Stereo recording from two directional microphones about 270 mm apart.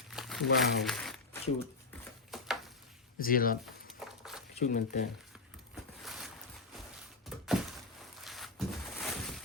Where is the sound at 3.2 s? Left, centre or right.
Left.